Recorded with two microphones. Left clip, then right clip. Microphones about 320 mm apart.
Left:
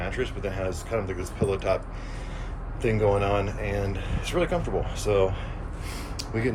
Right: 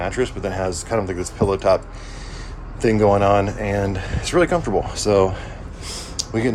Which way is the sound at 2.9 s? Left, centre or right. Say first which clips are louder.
Right 9 dB; right.